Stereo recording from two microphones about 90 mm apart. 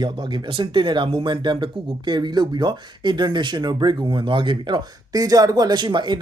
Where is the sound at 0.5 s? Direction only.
65° right (ahead or behind).